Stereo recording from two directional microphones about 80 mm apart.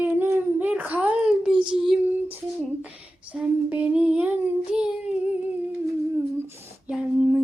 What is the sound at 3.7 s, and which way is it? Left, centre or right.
Child singing, centre.